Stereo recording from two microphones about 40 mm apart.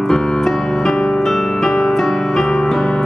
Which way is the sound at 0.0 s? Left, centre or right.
Centre.